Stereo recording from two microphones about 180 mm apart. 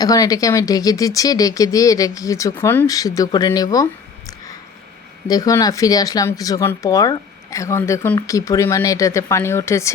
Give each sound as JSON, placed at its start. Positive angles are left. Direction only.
{"t": 0.0, "sound": "speech", "side_deg": 20}
{"t": 5.3, "sound": "speech", "side_deg": 20}